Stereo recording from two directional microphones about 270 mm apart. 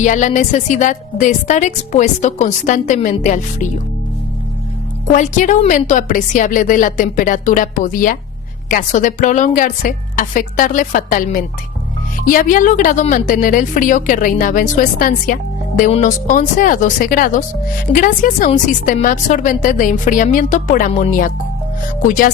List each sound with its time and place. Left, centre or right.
0.0 s speech: left
5.0 s speech: left